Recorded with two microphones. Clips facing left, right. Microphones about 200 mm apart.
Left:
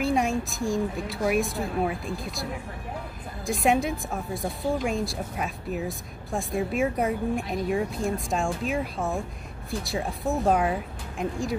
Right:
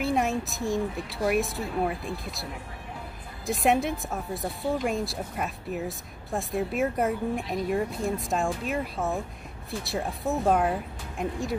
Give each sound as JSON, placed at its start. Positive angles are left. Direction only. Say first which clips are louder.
{"t": 0.0, "sound": "speech", "louder": "left 1 dB", "side_deg": 0}
{"t": 3.4, "sound": "speech", "louder": "left 1 dB", "side_deg": 0}